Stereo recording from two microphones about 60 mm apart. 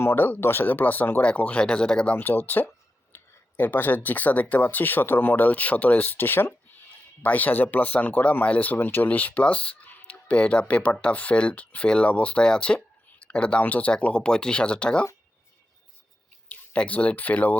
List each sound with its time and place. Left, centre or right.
0.0 s speech: left; by 2.1 s centre
2.1 s speech: left
16.5 s speech: left